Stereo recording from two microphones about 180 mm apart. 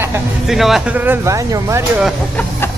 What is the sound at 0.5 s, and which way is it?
Speech, centre (ahead or behind).